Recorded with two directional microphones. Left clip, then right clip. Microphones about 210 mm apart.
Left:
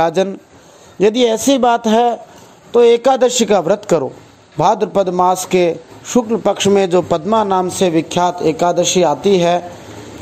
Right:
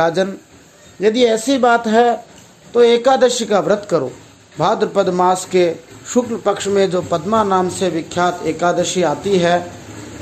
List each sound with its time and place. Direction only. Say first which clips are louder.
0.0 s a man's voice: left 1 dB; 30° left (ahead or behind)